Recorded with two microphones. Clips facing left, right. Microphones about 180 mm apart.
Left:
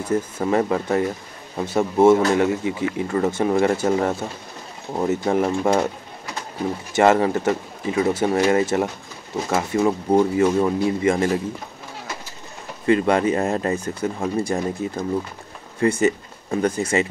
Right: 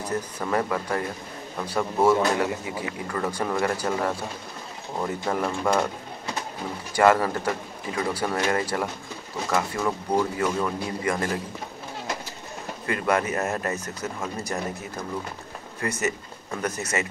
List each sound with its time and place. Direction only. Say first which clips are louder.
0.0 s speech: left 7 dB; 25° left (ahead or behind)
6.9 s speech: left 3 dB; 25° left (ahead or behind)
12.8 s speech: left 7 dB; 25° left (ahead or behind)